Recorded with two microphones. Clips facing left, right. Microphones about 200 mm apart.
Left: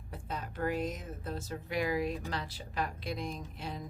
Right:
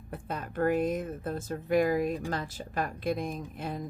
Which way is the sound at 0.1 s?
55° right (ahead or behind).